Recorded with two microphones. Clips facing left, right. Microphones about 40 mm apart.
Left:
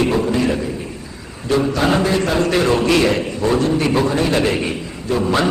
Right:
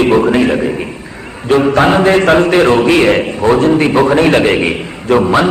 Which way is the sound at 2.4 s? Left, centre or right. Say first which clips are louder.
Right 7 dB; right.